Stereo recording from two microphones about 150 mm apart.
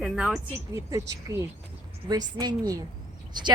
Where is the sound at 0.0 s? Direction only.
5° right (ahead or behind).